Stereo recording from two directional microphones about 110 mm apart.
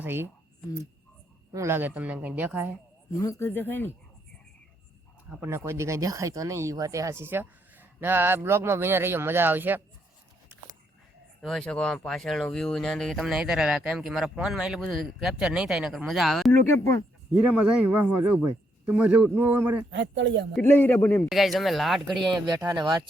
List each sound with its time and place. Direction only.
0.0 s speech: 20° right (ahead or behind)
1.5 s a man's voice: 20° right (ahead or behind)
3.1 s speech: 30° left (ahead or behind)
3.5 s speech: 20° left (ahead or behind)
5.4 s speech: 20° right (ahead or behind)
11.4 s speech: 5° left (ahead or behind)
16.5 s speech: 25° left (ahead or behind)
17.3 s a man's voice: 10° right (ahead or behind)
20.6 s speech: 20° left (ahead or behind)
21.2 s speech: centre (ahead or behind)
22.2 s speech: 40° right (ahead or behind)